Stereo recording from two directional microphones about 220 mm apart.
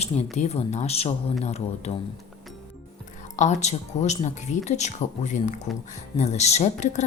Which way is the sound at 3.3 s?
35° left (ahead or behind).